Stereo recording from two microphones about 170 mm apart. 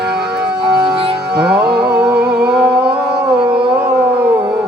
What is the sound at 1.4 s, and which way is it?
Music, 5° right (ahead or behind).